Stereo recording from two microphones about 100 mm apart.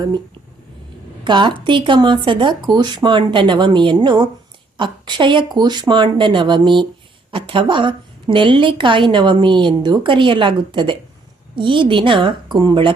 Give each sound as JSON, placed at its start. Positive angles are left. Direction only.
{"t": 1.2, "sound": "a woman's voice", "side_deg": -50}